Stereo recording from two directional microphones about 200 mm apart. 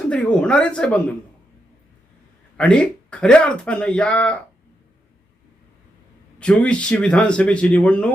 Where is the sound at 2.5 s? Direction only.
5° left (ahead or behind).